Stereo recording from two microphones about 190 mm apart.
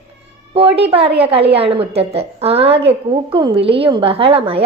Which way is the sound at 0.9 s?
30° right (ahead or behind).